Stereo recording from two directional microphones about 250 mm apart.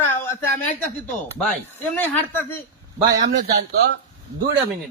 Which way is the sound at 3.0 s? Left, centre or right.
Right.